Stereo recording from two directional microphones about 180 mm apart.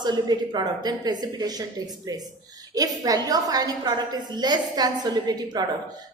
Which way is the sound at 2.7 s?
20° right (ahead or behind).